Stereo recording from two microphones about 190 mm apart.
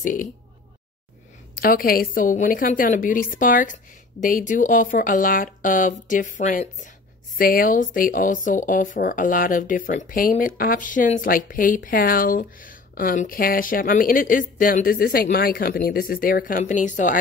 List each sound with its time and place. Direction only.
0.0 s speech: 45° left (ahead or behind)
1.5 s speech: 50° left (ahead or behind)